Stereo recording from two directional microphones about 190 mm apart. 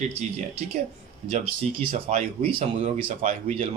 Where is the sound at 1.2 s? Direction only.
30° right (ahead or behind).